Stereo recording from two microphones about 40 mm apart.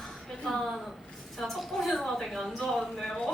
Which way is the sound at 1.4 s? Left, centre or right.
Centre.